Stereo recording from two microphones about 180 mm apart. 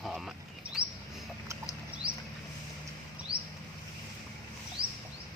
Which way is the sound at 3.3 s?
60° right (ahead or behind).